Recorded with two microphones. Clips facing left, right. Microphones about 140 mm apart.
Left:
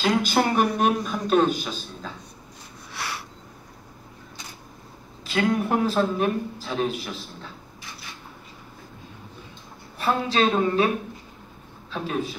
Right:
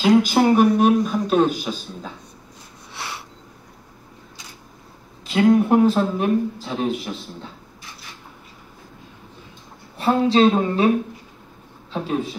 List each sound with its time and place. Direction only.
0.0 s a man's voice: 10° right (ahead or behind)
2.9 s a sound: 20° right (ahead or behind)
5.2 s speech: 20° right (ahead or behind)
9.9 s speech: 25° right (ahead or behind)
11.9 s speech: 25° right (ahead or behind)